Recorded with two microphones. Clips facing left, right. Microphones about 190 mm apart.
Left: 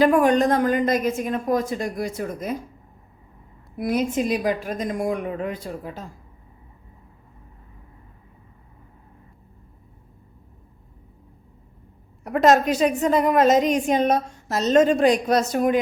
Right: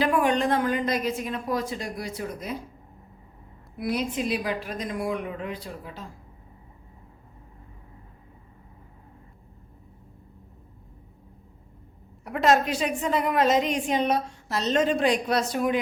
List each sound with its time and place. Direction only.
0.0 s a woman's voice: 45° left (ahead or behind)
3.8 s a woman's voice: 45° left (ahead or behind)
12.2 s a woman's voice: 45° left (ahead or behind)